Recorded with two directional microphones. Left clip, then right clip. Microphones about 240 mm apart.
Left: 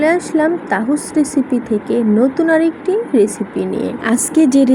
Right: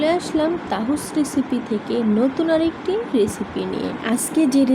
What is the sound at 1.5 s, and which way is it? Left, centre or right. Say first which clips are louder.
Speech: left 6 dB; left.